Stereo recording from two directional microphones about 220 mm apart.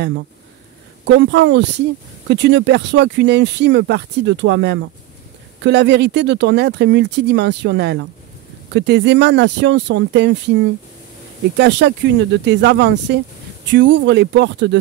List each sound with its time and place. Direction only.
1.0 s speech: 55° right (ahead or behind)
11.5 s speech: 50° right (ahead or behind)